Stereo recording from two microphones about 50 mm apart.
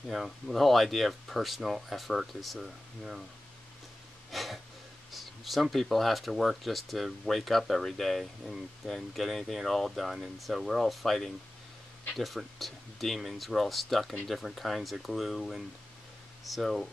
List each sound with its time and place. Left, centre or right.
0.1 s speech: centre
4.3 s a sound: centre
5.1 s speech: centre